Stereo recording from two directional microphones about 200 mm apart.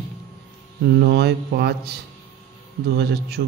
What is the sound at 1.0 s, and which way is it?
Speech, 55° right (ahead or behind).